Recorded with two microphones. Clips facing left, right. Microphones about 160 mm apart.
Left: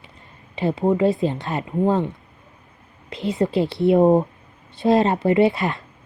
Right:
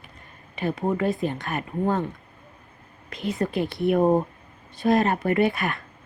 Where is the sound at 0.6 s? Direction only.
25° left (ahead or behind).